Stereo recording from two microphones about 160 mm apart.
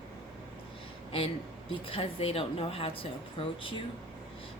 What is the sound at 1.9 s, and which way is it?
Speech, 35° left (ahead or behind).